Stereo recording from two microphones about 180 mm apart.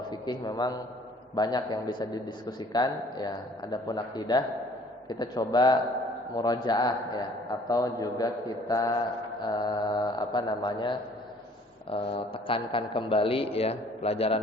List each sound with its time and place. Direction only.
0.1 s a man's voice: 25° left (ahead or behind)